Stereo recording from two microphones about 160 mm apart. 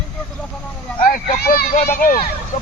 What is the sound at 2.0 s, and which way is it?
Speech, 60° left (ahead or behind).